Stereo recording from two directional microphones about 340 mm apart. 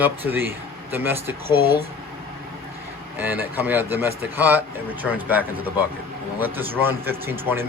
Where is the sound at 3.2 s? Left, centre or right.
Centre.